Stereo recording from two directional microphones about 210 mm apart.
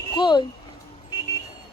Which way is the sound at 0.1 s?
20° left (ahead or behind).